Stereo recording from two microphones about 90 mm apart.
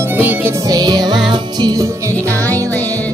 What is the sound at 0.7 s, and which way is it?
Music, 45° right (ahead or behind).